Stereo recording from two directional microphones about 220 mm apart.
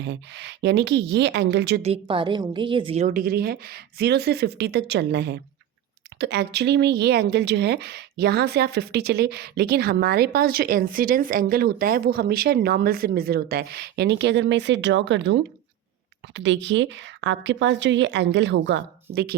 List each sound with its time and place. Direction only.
0.0 s speech: 50° right (ahead or behind)
1.8 s a woman's voice: 25° right (ahead or behind)
3.1 s a woman's voice: 40° right (ahead or behind)